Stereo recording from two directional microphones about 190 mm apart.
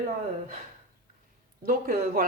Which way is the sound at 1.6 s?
45° right (ahead or behind).